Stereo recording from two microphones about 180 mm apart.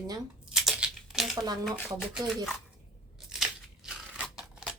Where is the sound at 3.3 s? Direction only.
5° right (ahead or behind).